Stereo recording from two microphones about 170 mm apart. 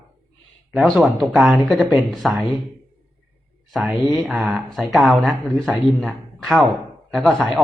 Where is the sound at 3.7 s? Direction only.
5° right (ahead or behind).